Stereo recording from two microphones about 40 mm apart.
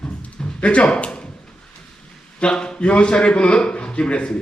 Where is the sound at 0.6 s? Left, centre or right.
Left.